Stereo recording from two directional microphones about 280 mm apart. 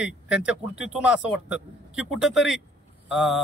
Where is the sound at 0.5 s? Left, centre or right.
Centre.